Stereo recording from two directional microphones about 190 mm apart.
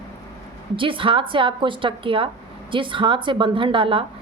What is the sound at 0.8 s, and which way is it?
A woman's voice, 25° right (ahead or behind).